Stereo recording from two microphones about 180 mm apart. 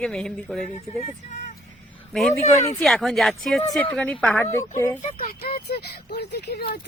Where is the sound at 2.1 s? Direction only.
Centre (ahead or behind).